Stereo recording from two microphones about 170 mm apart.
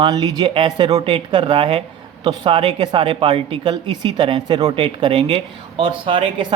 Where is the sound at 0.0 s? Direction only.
25° right (ahead or behind).